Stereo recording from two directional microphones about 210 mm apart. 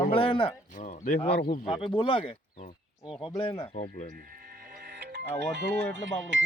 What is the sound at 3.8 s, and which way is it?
Speech, 45° left (ahead or behind).